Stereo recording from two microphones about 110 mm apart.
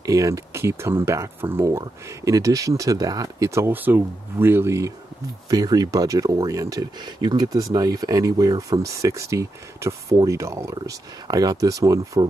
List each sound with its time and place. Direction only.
0.0 s speech: 30° right (ahead or behind)